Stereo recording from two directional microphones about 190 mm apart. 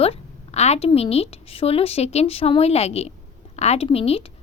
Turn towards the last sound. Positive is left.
turn(degrees=30)  # may be behind; listen again after turning